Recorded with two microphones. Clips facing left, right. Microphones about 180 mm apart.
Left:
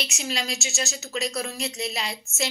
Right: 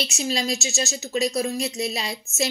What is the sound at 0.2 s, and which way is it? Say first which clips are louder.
Speech: right 6 dB; 30° right (ahead or behind).